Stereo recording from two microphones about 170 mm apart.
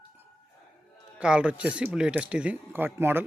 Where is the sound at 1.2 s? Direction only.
5° right (ahead or behind).